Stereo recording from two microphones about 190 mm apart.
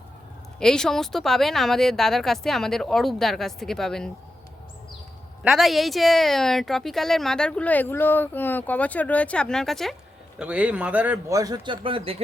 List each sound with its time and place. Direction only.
0.6 s speech: 5° left (ahead or behind)
5.4 s a man's voice: centre (ahead or behind); by 12.1 s 30° right (ahead or behind)